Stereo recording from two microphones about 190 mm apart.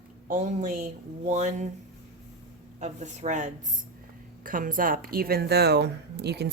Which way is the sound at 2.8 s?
40° right (ahead or behind).